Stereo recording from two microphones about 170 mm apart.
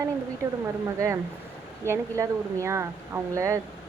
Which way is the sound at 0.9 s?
15° right (ahead or behind).